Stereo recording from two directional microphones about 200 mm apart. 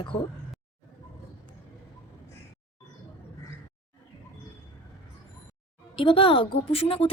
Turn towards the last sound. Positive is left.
turn(degrees=30)  # may be behind; listen again after turning